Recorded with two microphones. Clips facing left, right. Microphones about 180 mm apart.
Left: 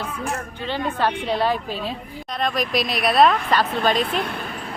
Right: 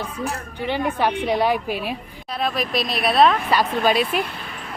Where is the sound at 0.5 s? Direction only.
15° right (ahead or behind).